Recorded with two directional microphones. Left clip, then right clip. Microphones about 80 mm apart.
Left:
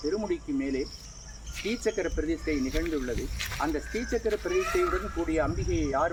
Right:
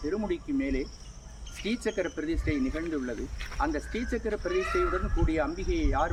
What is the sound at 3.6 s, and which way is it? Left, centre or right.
Speech, centre.